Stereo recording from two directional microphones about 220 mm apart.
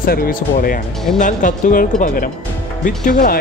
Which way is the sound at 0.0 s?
40° left (ahead or behind).